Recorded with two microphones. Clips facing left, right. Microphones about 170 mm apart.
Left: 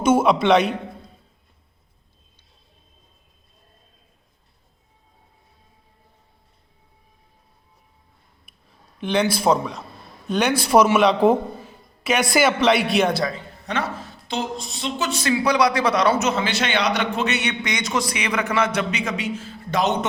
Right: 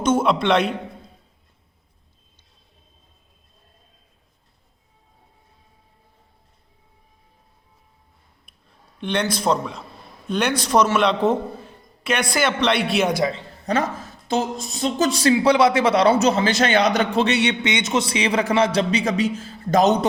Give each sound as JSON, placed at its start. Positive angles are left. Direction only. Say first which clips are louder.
{"t": 0.0, "sound": "a man's voice", "louder": "left 2 dB", "side_deg": 5}
{"t": 9.0, "sound": "a man's voice", "louder": "left 2 dB", "side_deg": 0}
{"t": 13.1, "sound": "a man's voice", "louder": "right 3 dB", "side_deg": -20}
{"t": 13.7, "sound": "speech", "louder": "right 4 dB", "side_deg": -40}